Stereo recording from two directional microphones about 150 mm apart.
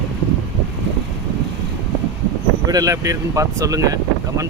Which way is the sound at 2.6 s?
25° right (ahead or behind).